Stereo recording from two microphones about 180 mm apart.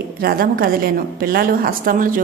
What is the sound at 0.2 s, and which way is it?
A woman's voice, 55° right (ahead or behind).